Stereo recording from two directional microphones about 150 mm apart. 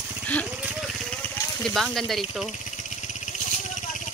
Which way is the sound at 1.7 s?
Centre (ahead or behind).